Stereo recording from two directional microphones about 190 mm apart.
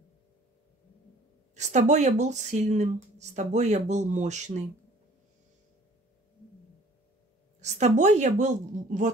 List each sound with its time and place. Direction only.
1.5 s speech: 40° right (ahead or behind)
7.6 s speech: 40° right (ahead or behind)